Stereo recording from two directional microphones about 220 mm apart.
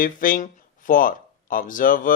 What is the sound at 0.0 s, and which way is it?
Speech, 40° left (ahead or behind).